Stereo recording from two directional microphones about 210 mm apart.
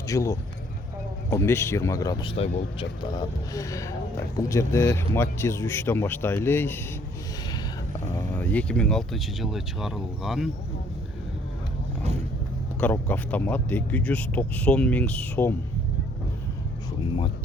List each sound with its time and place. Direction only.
0.1 s speech: 15° left (ahead or behind)
8.1 s speech: 10° left (ahead or behind)
12.8 s speech: 10° left (ahead or behind)